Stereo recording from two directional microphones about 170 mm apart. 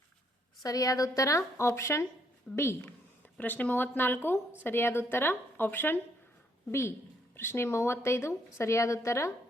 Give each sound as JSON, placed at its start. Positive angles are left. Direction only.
{"t": 0.6, "sound": "a woman's voice", "side_deg": 20}